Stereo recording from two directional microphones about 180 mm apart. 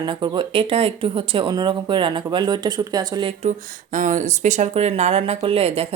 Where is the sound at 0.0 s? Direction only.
25° right (ahead or behind).